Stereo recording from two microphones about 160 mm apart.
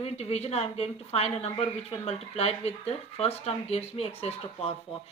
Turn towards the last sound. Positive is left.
turn(degrees=40)  # may be behind; listen again after turning